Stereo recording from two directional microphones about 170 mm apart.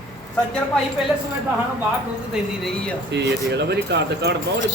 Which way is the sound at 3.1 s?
85° right.